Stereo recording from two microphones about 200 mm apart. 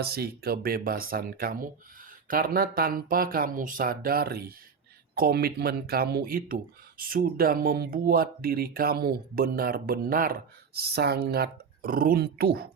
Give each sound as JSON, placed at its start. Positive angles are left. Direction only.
{"t": 0.0, "sound": "speech", "side_deg": -50}